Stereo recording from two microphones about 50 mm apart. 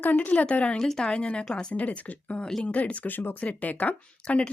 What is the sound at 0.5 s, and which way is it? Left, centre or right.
Speech, left.